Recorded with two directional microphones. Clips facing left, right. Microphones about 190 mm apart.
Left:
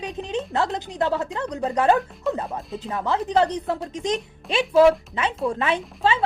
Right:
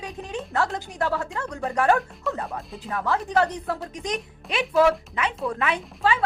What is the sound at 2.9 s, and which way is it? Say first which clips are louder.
Speech: left 2 dB; 20° left (ahead or behind).